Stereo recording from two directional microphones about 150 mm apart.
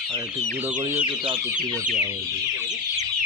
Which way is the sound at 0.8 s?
15° right (ahead or behind).